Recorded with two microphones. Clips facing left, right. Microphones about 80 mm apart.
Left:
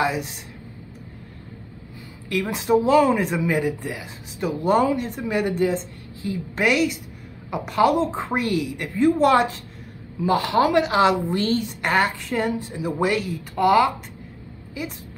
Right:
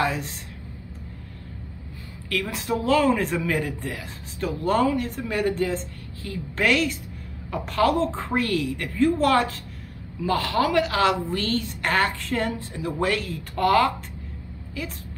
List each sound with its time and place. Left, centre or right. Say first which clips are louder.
0.0 s a woman's voice: left 2 dB; centre
2.2 s a woman's voice: left 4 dB; centre